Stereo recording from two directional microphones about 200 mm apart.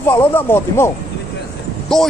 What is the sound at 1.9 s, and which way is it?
Speech, centre (ahead or behind).